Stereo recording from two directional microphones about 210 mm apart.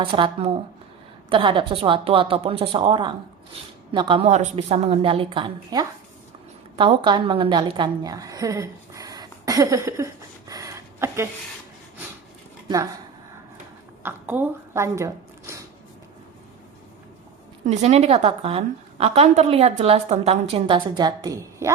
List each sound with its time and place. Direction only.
0.0 s a woman's voice: 25° right (ahead or behind)
10.5 s a sound: 15° right (ahead or behind)
12.6 s speech: 15° right (ahead or behind)
14.0 s speech: 10° right (ahead or behind)
17.7 s a woman's voice: 30° right (ahead or behind); by 21.7 s 15° right (ahead or behind)